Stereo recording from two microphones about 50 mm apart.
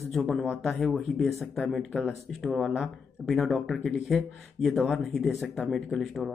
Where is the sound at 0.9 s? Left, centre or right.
Centre.